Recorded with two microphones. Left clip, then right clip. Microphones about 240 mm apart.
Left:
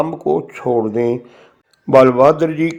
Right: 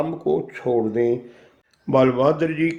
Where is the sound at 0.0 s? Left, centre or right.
Left.